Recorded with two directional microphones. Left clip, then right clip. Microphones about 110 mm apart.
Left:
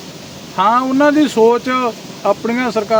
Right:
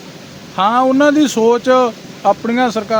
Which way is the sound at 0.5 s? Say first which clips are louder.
Right 1 dB; 20° right (ahead or behind).